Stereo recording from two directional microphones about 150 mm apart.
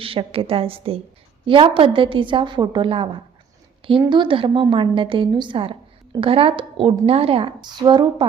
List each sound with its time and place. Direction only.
0.0 s a woman's voice: 40° right (ahead or behind)